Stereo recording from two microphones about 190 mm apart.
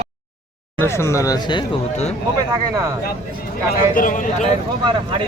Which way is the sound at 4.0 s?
45° left (ahead or behind).